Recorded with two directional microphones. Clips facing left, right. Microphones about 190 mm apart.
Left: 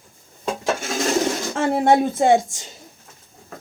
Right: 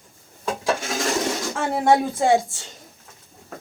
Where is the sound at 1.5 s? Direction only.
25° left (ahead or behind).